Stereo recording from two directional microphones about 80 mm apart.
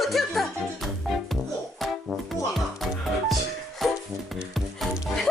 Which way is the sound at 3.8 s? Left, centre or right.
Centre.